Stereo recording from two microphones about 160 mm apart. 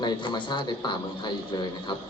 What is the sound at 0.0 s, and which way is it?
Speech, 30° left (ahead or behind).